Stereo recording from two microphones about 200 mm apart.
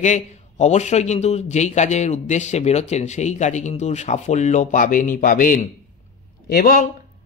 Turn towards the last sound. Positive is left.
turn(degrees=45)  # may be behind; listen again after turning